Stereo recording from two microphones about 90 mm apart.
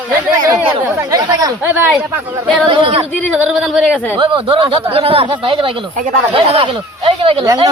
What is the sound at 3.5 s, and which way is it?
Speech, centre (ahead or behind).